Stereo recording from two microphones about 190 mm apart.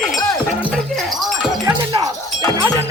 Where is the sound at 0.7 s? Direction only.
Centre (ahead or behind).